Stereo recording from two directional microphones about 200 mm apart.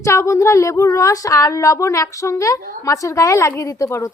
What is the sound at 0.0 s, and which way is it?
Speech, 15° left (ahead or behind).